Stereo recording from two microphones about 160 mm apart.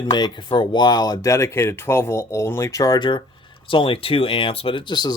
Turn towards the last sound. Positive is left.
turn(degrees=25)  # may be behind; listen again after turning